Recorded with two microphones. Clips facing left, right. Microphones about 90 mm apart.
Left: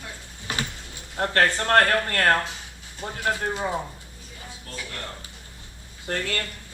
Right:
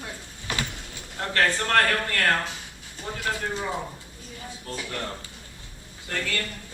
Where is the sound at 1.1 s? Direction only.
45° left (ahead or behind); by 3.5 s 30° left (ahead or behind).